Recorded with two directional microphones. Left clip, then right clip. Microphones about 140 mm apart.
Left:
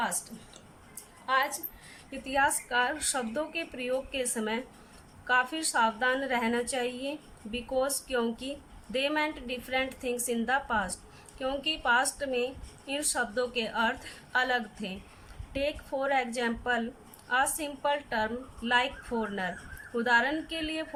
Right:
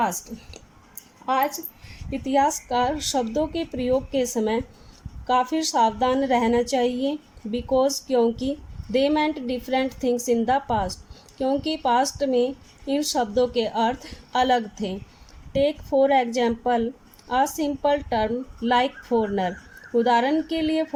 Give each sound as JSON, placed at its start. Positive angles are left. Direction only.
{"t": 2.0, "sound": "a woman's voice", "side_deg": -35}